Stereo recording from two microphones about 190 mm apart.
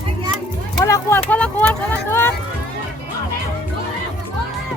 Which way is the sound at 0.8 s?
15° left (ahead or behind).